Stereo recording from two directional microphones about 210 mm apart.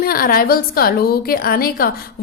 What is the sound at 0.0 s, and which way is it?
A woman's voice, 45° left (ahead or behind).